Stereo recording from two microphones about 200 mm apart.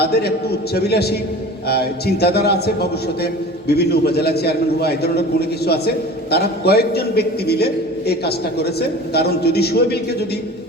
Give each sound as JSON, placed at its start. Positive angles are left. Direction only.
{"t": 0.0, "sound": "a man's voice", "side_deg": 55}